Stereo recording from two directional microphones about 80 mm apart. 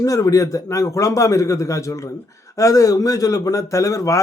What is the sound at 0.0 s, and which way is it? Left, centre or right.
A man's voice, left.